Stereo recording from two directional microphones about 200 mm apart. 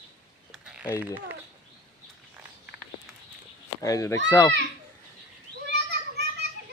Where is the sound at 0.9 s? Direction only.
10° right (ahead or behind).